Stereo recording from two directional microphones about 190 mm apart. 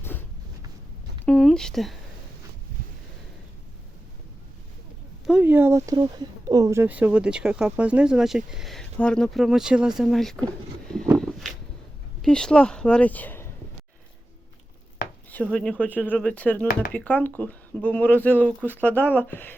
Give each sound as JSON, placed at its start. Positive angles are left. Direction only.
{"t": 1.2, "sound": "speech", "side_deg": 5}
{"t": 2.8, "sound": "a sound", "side_deg": -45}
{"t": 5.2, "sound": "speech", "side_deg": -5}
{"t": 11.2, "sound": "a sound", "side_deg": 0}
{"t": 12.2, "sound": "speech", "side_deg": 5}
{"t": 15.5, "sound": "speech", "side_deg": 5}